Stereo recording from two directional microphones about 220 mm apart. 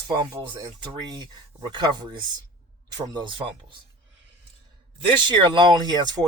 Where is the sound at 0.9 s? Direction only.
20° right (ahead or behind).